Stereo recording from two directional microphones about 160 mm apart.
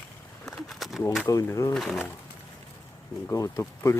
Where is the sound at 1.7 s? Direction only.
5° left (ahead or behind).